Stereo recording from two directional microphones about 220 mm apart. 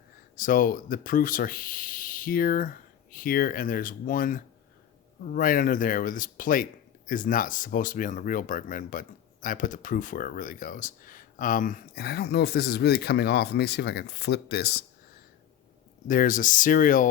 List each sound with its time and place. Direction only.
0.3 s speech: 40° left (ahead or behind)
16.0 s speech: 35° left (ahead or behind)